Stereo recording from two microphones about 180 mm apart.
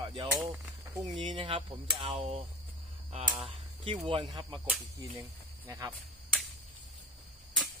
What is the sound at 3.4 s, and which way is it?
Speech, 35° right (ahead or behind).